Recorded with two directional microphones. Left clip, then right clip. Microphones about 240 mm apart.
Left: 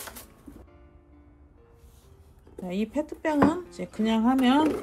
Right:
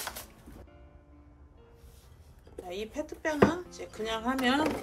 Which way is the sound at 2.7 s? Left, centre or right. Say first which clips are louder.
Left 7 dB; left.